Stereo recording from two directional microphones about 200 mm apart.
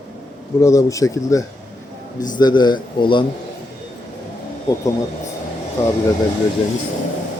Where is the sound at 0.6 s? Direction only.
15° left (ahead or behind).